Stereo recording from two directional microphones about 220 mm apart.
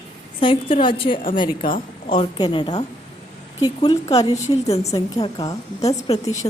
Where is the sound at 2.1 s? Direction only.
20° left (ahead or behind).